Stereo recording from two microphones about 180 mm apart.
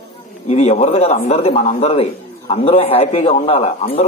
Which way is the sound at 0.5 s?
40° left (ahead or behind).